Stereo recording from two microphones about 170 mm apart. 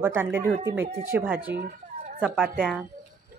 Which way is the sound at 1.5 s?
50° right (ahead or behind).